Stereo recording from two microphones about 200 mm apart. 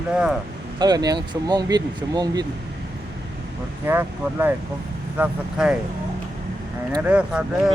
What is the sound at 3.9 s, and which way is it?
Speech, 10° right (ahead or behind).